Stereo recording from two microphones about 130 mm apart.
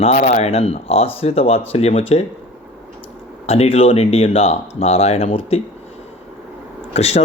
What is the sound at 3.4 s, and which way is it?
Speech, 55° left (ahead or behind).